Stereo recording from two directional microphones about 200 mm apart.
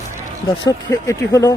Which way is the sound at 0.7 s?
15° left (ahead or behind).